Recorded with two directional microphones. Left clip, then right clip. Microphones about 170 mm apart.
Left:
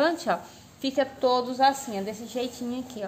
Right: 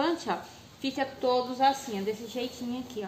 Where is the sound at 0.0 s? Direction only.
80° left.